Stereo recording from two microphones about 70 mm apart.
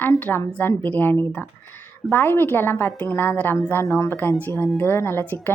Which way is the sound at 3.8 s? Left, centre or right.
Left.